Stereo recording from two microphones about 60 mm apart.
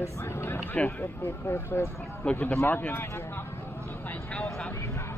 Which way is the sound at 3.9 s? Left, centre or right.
Left.